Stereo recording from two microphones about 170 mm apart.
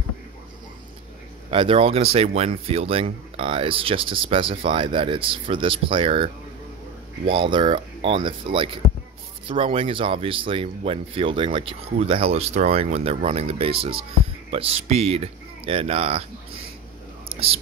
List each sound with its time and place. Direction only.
1.5 s speech: 35° right (ahead or behind)
17.3 s whispering: 35° right (ahead or behind)